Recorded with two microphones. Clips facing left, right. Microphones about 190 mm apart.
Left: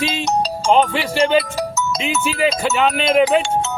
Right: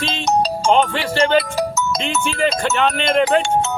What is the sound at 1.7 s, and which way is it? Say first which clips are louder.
Music: right 1 dB; 55° right (ahead or behind).